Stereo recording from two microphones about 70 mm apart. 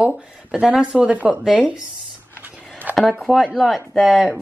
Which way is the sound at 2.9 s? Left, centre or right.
Right.